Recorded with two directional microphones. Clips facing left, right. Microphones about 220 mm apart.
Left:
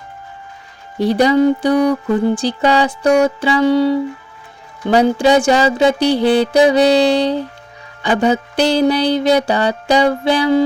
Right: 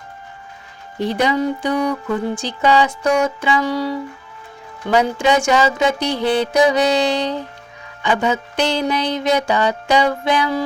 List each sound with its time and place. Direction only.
0.9 s mantra: 35° left (ahead or behind)